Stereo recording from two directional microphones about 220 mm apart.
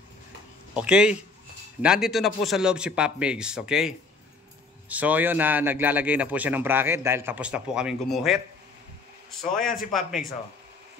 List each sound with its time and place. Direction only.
0.7 s a man's voice: 5° right (ahead or behind)
9.4 s a man's voice: centre (ahead or behind)